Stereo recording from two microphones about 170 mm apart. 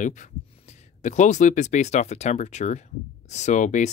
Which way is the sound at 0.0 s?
45° left (ahead or behind).